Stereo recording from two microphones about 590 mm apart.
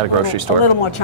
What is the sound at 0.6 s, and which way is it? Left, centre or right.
Speech, left.